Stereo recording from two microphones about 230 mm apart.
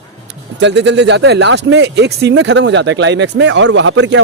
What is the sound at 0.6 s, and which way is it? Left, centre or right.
Speech, right.